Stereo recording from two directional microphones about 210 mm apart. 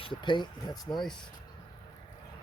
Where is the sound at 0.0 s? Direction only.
20° left (ahead or behind).